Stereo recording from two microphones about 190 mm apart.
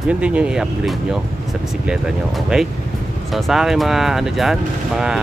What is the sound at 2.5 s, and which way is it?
Speech, 5° right (ahead or behind).